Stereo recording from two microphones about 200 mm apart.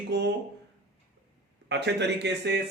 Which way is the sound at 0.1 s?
55° right (ahead or behind).